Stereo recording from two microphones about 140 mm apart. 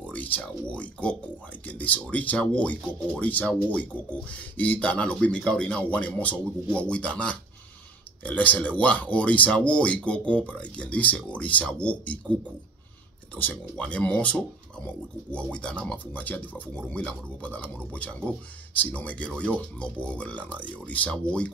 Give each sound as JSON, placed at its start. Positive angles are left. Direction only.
{"t": 0.0, "sound": "speech", "side_deg": 10}
{"t": 13.4, "sound": "speech", "side_deg": 10}